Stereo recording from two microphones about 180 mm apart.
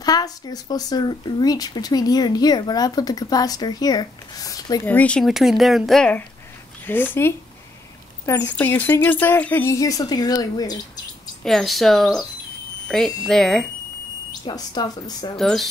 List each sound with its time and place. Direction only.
0.0 s speech: 20° left (ahead or behind)
4.8 s speech: 10° left (ahead or behind)
11.4 s speech: centre (ahead or behind)
14.4 s speech: 25° left (ahead or behind)
15.3 s speech: centre (ahead or behind)